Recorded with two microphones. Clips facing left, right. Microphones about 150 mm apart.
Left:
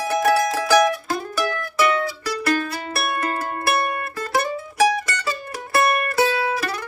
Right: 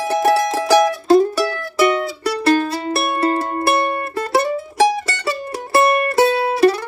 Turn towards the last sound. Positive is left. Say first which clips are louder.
# right 8 dB
turn(degrees=-30)  # may be behind; listen again after turning